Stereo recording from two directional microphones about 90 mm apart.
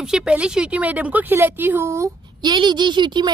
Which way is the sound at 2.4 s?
55° right (ahead or behind).